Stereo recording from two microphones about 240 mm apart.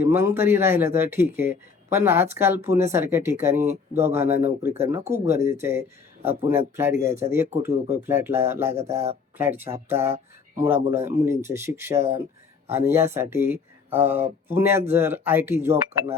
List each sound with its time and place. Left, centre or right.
0.0 s speech: centre
8.7 s speech: right
9.4 s speech: centre